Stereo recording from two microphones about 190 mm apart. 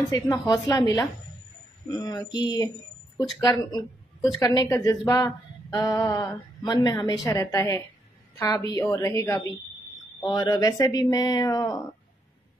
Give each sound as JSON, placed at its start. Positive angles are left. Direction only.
{"t": 0.1, "sound": "a woman's voice", "side_deg": 15}